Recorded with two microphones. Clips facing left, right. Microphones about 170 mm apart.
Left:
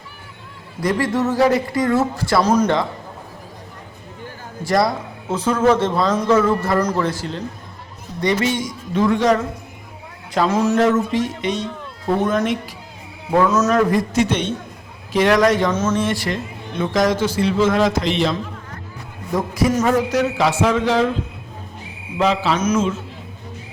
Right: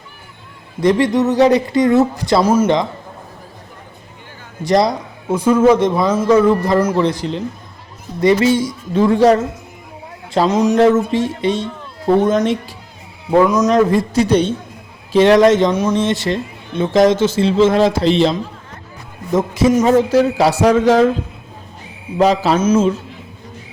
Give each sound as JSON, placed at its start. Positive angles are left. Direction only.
{"t": 0.8, "sound": "a man's voice", "side_deg": -20}
{"t": 4.6, "sound": "a man's voice", "side_deg": -20}
{"t": 10.3, "sound": "a man's voice", "side_deg": -20}
{"t": 10.8, "sound": "a man's voice", "side_deg": -30}
{"t": 13.3, "sound": "a man's voice", "side_deg": -15}
{"t": 13.7, "sound": "a man's voice", "side_deg": -30}
{"t": 22.2, "sound": "speech", "side_deg": -40}